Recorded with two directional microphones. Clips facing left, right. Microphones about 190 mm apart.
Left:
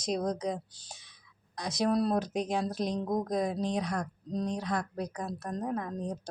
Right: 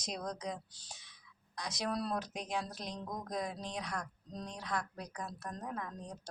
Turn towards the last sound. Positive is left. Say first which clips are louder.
# left 9 dB
turn(degrees=35)  # may be behind; listen again after turning